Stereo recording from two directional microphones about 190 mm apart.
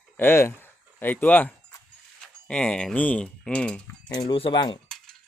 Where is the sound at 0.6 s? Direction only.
10° left (ahead or behind).